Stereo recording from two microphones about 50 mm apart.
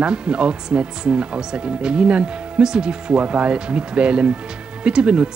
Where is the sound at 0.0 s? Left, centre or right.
Centre.